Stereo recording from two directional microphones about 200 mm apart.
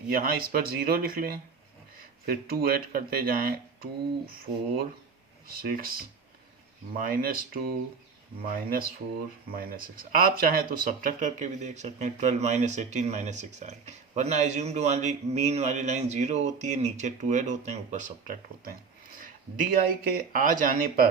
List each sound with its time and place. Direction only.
0.1 s speech: 50° right (ahead or behind)
5.5 s speech: 45° right (ahead or behind)